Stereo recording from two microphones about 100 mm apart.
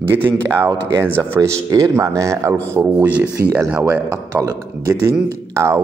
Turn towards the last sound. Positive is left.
turn(degrees=-30)  # may be behind; listen again after turning